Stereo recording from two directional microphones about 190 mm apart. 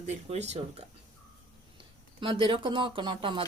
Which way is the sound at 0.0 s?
35° right (ahead or behind).